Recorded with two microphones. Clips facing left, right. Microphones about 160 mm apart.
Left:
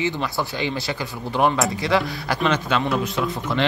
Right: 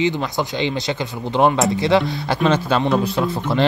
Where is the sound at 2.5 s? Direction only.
35° right (ahead or behind).